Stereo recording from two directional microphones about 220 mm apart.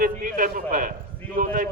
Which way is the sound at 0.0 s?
40° right (ahead or behind).